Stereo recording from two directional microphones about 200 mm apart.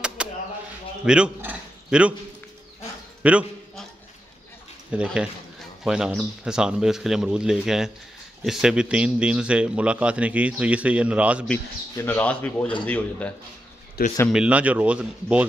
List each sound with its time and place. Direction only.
0.2 s bird: 5° right (ahead or behind)
1.0 s a man's voice: 5° right (ahead or behind)
3.2 s a sound: 5° right (ahead or behind)
4.9 s speech: 5° right (ahead or behind)
11.9 s speech: 10° left (ahead or behind)
14.0 s speech: 50° left (ahead or behind)
14.3 s speech: 5° right (ahead or behind)